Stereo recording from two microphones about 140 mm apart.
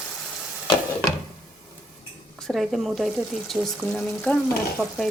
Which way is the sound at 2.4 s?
Centre (ahead or behind).